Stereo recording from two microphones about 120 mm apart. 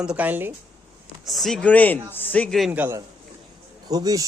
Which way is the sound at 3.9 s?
30° right (ahead or behind).